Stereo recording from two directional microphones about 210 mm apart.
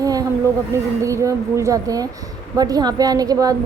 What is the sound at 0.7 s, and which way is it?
A woman's voice, 15° right (ahead or behind).